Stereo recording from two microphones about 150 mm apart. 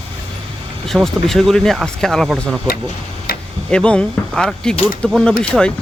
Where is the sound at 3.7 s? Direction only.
5° left (ahead or behind).